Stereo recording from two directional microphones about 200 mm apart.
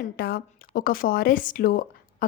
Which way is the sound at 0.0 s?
50° left (ahead or behind).